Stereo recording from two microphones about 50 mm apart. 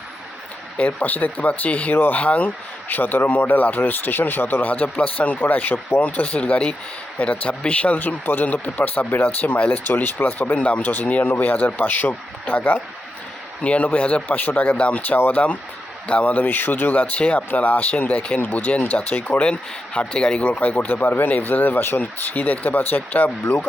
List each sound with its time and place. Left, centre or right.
0.8 s speech: left
2.2 s speech: left
2.9 s speech: left
11.2 s speech: left
20.9 s speech: left